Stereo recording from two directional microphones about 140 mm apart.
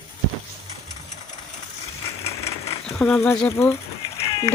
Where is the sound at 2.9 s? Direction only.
15° left (ahead or behind).